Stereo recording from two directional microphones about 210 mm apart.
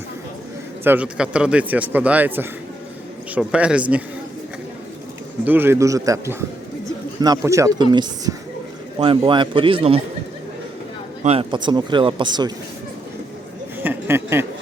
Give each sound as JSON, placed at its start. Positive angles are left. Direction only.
{"t": 0.9, "sound": "a man's voice", "side_deg": -5}
{"t": 5.5, "sound": "a man's voice", "side_deg": -10}
{"t": 11.2, "sound": "speech", "side_deg": -30}
{"t": 13.7, "sound": "a sound", "side_deg": -10}